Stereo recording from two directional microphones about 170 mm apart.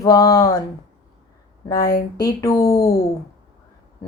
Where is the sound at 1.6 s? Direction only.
20° left (ahead or behind).